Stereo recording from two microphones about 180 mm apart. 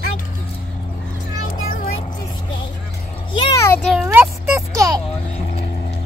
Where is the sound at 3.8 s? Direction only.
Centre (ahead or behind).